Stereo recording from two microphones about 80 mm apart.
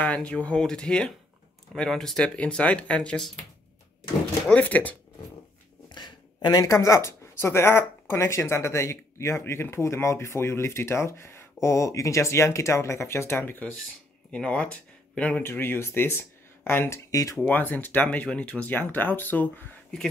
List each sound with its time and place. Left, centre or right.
0.0 s speech: centre
4.5 s speech: centre
5.9 s speech: left; by 15.4 s centre
15.4 s speech: left
17.1 s speech: left
17.5 s speech: left